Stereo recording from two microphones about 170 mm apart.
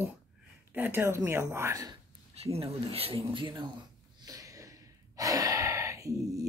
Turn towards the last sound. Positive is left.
turn(degrees=-20)  # may be behind; listen again after turning